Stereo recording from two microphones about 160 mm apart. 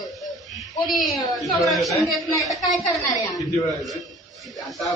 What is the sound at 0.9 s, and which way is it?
A man's voice, centre (ahead or behind).